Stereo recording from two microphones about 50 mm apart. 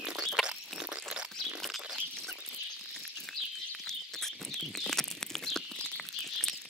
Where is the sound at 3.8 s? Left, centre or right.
Centre.